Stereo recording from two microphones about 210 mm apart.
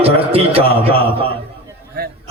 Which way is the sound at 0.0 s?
30° right (ahead or behind).